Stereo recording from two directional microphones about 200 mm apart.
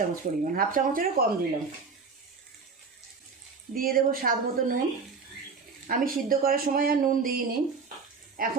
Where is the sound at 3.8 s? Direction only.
45° right (ahead or behind).